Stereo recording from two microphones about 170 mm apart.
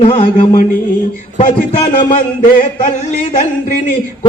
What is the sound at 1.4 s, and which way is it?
A man's voice, 45° left (ahead or behind).